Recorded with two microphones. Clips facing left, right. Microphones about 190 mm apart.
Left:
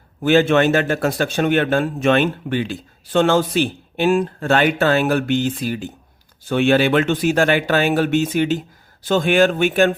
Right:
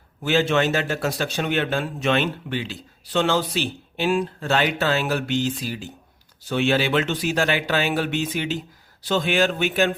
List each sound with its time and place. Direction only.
0.2 s a man's voice: 55° left (ahead or behind)